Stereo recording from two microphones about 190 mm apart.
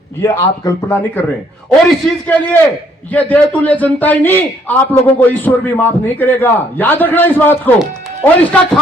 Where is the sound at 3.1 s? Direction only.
10° left (ahead or behind).